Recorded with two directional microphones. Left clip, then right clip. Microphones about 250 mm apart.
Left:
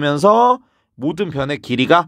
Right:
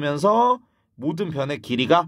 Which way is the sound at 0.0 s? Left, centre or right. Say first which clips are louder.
Left 6 dB; left.